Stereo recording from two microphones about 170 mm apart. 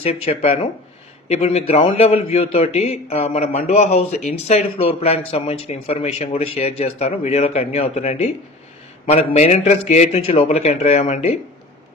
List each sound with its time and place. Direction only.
0.0 s a man's voice: 35° left (ahead or behind)